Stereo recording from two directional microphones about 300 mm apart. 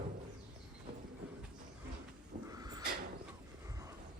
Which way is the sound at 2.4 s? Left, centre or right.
Centre.